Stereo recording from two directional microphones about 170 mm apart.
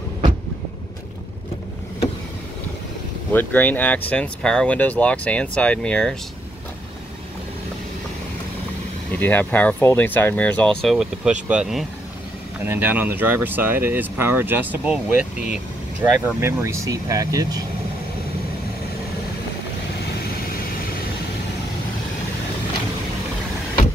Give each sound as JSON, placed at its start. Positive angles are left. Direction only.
{"t": 3.3, "sound": "speech", "side_deg": 10}
{"t": 9.1, "sound": "speech", "side_deg": 10}
{"t": 15.5, "sound": "vehicle", "side_deg": -10}
{"t": 16.3, "sound": "speech", "side_deg": -15}